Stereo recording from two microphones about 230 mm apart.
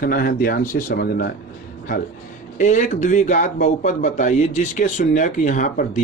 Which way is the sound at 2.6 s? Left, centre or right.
Left.